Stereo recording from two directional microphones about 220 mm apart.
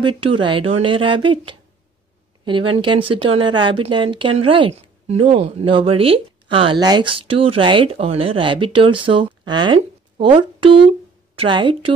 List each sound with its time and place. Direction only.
0.0 s speech: 20° right (ahead or behind)